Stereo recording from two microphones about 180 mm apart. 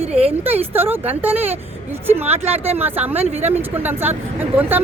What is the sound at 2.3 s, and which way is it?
Speech, 35° right (ahead or behind).